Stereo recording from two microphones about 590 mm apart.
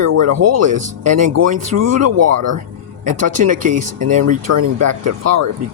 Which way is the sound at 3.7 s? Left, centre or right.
Right.